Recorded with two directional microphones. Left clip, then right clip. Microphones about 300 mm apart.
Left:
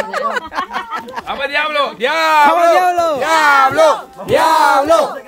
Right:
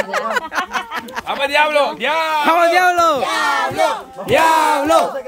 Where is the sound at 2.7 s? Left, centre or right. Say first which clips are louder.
Even; centre.